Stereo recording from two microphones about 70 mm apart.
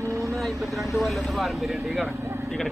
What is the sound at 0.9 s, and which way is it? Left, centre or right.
Speech, centre.